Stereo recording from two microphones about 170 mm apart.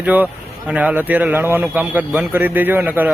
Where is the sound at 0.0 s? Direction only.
10° right (ahead or behind).